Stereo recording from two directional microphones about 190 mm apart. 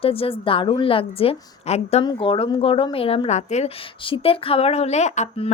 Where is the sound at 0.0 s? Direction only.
30° left (ahead or behind).